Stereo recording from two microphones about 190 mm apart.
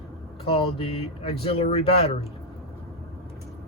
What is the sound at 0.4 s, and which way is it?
Speech, 30° left (ahead or behind).